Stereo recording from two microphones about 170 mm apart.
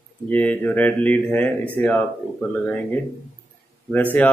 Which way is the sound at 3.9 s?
10° left (ahead or behind).